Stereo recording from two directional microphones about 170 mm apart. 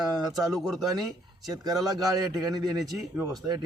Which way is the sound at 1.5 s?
20° right (ahead or behind).